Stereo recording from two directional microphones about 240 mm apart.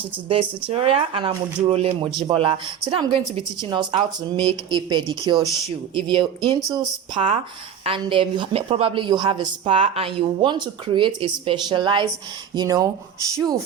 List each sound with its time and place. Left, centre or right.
0.3 s a woman's voice: right